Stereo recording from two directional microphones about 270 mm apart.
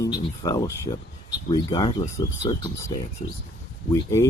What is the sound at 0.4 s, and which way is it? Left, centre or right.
Speech, centre.